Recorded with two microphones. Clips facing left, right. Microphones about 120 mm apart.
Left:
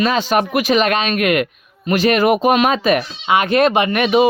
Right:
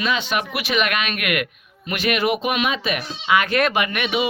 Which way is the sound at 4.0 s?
40° left (ahead or behind).